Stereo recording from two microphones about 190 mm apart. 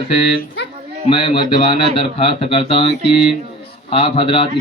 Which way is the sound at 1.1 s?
25° left (ahead or behind).